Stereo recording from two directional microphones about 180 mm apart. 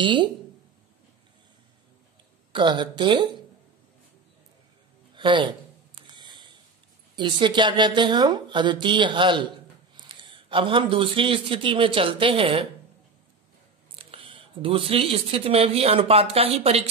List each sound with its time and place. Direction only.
0.0 s a woman's voice: 25° right (ahead or behind)
2.5 s a woman's voice: 25° right (ahead or behind)
5.1 s a sound: 25° right (ahead or behind)
7.2 s a woman's voice: 25° right (ahead or behind)
13.9 s speech: 30° right (ahead or behind)